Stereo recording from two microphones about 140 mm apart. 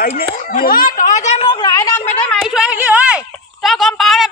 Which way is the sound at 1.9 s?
10° left (ahead or behind).